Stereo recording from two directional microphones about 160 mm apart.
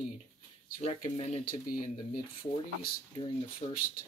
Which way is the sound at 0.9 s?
35° left (ahead or behind).